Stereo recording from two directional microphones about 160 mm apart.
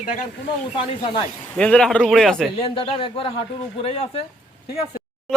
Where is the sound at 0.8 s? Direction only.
30° left (ahead or behind).